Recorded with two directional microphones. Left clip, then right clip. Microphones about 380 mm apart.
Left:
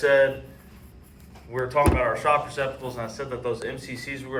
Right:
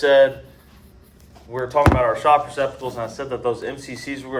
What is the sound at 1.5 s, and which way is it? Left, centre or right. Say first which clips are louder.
Speech: right 4 dB; right.